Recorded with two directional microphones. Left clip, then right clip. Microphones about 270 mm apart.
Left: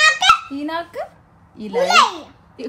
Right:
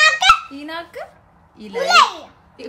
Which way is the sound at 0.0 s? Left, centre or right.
Centre.